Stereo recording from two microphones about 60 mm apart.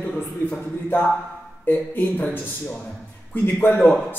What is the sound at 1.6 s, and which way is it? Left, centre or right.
A man's voice, left.